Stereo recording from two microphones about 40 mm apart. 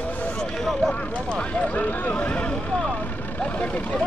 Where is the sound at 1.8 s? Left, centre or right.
Left.